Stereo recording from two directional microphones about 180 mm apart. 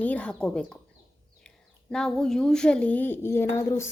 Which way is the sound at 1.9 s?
5° left (ahead or behind).